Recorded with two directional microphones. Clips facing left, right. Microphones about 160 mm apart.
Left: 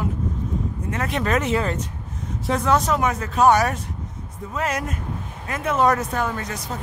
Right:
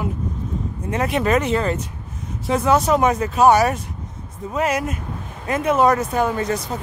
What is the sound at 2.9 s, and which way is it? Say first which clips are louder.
Speech: right 4 dB; 20° right (ahead or behind).